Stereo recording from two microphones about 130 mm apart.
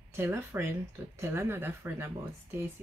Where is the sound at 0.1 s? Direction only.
20° right (ahead or behind).